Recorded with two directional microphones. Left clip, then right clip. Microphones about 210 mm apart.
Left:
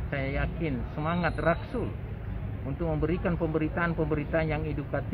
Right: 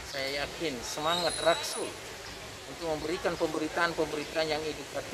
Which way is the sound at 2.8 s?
15° right (ahead or behind).